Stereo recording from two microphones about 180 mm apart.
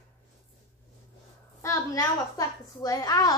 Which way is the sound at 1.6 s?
15° left (ahead or behind).